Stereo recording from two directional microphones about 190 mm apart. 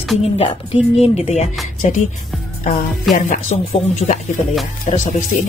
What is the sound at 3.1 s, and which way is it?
Speech, 40° left (ahead or behind).